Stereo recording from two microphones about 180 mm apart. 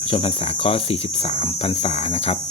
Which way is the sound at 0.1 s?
30° left (ahead or behind).